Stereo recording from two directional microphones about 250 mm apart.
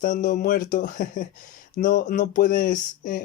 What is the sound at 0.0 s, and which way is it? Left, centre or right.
Speech, left.